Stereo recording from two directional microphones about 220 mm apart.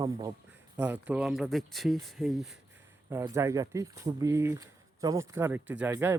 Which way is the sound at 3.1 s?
10° right (ahead or behind).